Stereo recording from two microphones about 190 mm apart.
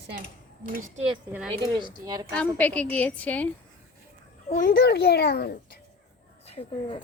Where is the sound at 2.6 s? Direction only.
5° left (ahead or behind).